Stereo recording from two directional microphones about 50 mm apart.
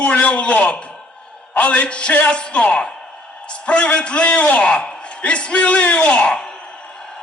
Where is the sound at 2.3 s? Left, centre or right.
Left.